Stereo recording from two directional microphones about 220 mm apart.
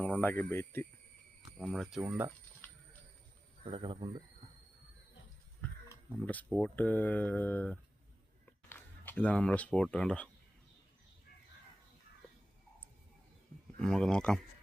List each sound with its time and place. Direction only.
0.2 s speech: 10° left (ahead or behind)
1.5 s speech: centre (ahead or behind)
2.0 s speech: 10° right (ahead or behind)
3.7 s speech: 20° right (ahead or behind)
5.6 s a sound: 5° left (ahead or behind)
6.2 s speech: 5° left (ahead or behind)
13.7 s speech: centre (ahead or behind)